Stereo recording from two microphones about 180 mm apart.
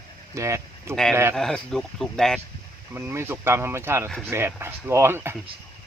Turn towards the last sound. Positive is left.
turn(degrees=-15)  # may be behind; listen again after turning